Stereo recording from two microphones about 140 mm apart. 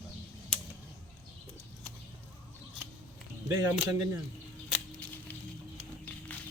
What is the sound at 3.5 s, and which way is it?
Speech, 20° right (ahead or behind).